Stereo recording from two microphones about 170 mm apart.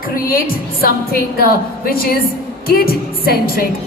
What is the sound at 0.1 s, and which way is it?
A man's voice, 55° left (ahead or behind).